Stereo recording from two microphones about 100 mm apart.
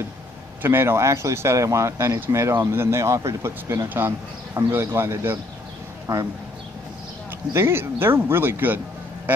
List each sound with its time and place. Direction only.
0.6 s speech: 25° right (ahead or behind)
7.5 s speech: 25° right (ahead or behind)